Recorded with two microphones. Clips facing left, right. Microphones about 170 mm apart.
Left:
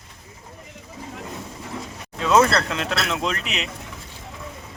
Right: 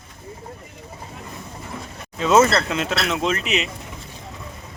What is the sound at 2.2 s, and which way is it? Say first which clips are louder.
Speech: right 2 dB; 5° right (ahead or behind).